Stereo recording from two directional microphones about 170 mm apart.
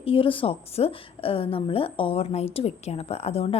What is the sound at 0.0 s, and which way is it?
A woman's voice, 30° left (ahead or behind).